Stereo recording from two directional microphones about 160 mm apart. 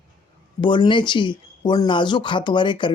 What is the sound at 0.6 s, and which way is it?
Speech, 30° left (ahead or behind).